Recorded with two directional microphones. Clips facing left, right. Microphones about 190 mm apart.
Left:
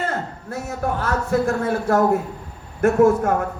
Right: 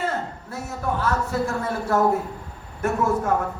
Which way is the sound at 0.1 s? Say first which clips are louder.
Left 2 dB; 50° left (ahead or behind).